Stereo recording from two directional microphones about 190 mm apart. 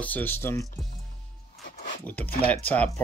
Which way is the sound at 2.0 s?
10° left (ahead or behind).